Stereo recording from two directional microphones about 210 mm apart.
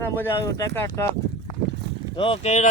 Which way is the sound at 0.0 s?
10° left (ahead or behind).